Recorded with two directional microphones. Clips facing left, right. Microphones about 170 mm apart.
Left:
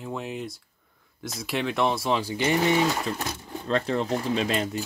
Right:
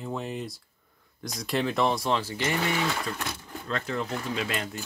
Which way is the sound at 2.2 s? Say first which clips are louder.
Left 5 dB; 15° left (ahead or behind).